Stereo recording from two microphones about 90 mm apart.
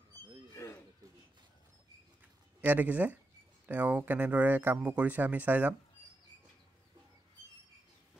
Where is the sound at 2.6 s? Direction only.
20° right (ahead or behind).